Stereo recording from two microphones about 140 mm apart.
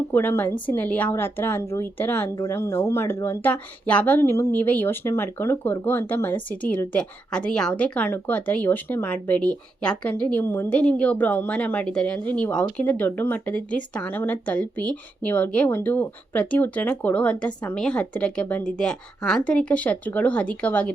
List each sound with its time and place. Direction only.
0.1 s speech: 15° left (ahead or behind)